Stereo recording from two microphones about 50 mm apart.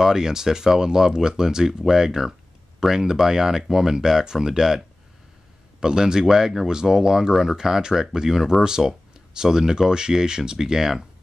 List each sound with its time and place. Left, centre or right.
0.0 s speech: centre